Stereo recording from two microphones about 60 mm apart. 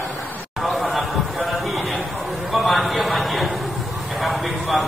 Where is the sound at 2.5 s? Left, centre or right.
Centre.